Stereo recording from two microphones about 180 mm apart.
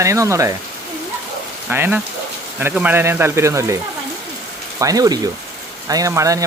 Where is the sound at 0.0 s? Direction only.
15° right (ahead or behind).